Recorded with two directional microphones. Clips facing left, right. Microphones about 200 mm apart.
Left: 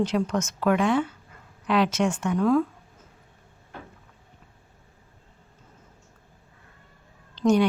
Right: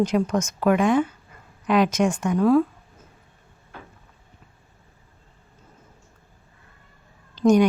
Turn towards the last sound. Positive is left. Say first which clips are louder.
# right 4 dB
turn(degrees=-10)  # may be behind; listen again after turning